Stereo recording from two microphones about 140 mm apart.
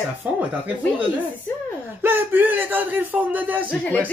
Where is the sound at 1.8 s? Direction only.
15° right (ahead or behind).